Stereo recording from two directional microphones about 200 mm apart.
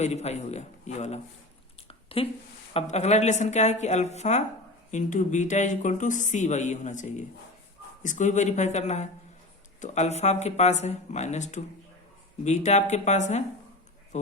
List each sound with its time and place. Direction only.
0.0 s speech: 35° left (ahead or behind)
1.9 s a sound: 30° left (ahead or behind)
2.7 s speech: 35° left (ahead or behind)